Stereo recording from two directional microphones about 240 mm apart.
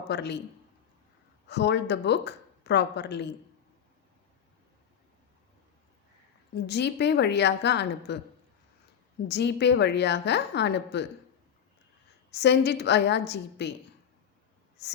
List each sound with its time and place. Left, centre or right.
0.1 s speech: left
1.5 s speech: left
6.7 s speech: left
9.2 s speech: left
12.3 s speech: left